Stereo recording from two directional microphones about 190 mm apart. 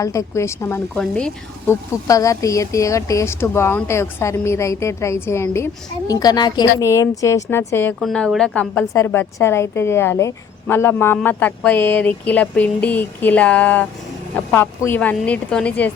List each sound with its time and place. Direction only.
0.0 s a woman's voice: 15° left (ahead or behind)
2.0 s a woman's voice: 15° left (ahead or behind)